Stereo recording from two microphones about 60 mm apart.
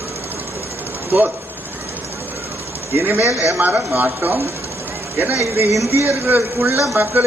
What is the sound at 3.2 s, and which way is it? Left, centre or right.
Speech, left.